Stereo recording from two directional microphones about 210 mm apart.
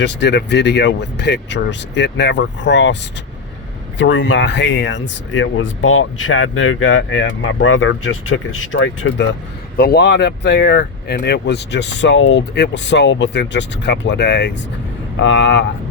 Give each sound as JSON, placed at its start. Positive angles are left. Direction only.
{"t": 0.0, "sound": "speech", "side_deg": 55}
{"t": 9.7, "sound": "speech", "side_deg": 50}